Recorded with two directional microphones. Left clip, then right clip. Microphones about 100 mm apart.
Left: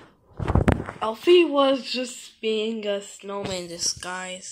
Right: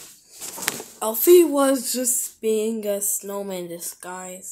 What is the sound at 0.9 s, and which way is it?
Speech, 55° right (ahead or behind).